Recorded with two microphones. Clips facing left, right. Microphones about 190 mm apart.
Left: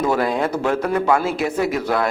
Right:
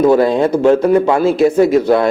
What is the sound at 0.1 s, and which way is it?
A man's voice, 30° right (ahead or behind).